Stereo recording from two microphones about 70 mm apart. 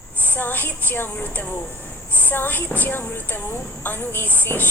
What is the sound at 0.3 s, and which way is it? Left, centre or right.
A woman's voice, left.